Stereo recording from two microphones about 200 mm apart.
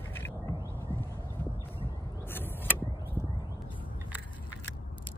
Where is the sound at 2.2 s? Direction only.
10° left (ahead or behind).